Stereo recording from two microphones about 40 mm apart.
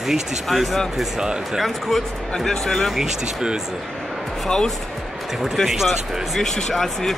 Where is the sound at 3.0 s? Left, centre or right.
Centre.